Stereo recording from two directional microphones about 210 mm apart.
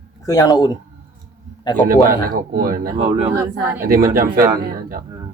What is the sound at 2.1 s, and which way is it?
Speech, 45° right (ahead or behind).